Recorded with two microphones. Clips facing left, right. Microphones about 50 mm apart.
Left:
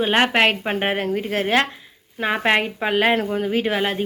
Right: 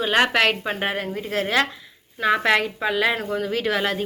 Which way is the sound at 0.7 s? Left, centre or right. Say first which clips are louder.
Left 4 dB; left.